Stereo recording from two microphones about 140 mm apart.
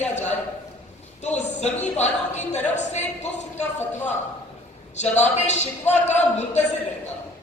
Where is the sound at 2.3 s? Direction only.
55° left (ahead or behind).